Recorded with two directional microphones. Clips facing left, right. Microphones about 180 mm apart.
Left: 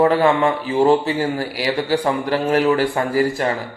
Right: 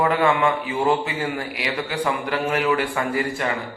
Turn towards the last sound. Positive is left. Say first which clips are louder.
# left 5 dB
turn(degrees=35)  # may be behind; listen again after turning